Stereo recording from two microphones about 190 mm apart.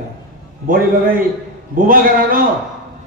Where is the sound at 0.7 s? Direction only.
45° right (ahead or behind).